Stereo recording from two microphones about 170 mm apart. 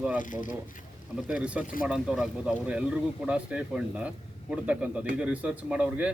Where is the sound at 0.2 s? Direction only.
50° left (ahead or behind).